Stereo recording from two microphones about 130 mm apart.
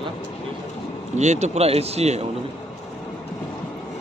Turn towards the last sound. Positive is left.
turn(degrees=-55)  # may be behind; listen again after turning